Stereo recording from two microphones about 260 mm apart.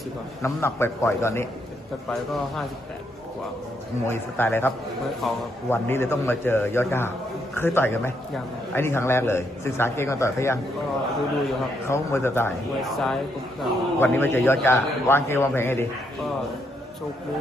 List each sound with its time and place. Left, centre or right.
0.4 s a man's voice: centre
4.1 s a man's voice: centre
11.9 s a man's voice: centre